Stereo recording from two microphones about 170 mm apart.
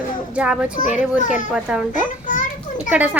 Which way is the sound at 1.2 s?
50° left (ahead or behind).